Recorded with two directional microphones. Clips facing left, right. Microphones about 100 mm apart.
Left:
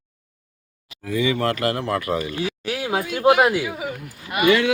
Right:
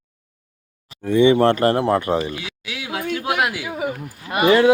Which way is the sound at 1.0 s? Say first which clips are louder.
Right 8 dB; 30° right (ahead or behind).